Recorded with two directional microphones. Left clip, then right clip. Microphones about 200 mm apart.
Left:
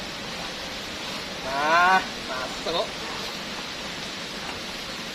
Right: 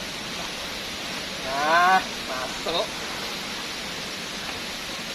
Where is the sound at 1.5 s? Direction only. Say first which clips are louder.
Even; 5° left (ahead or behind).